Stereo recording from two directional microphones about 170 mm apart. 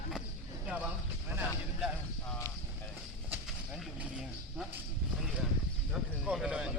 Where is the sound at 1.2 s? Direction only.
10° right (ahead or behind).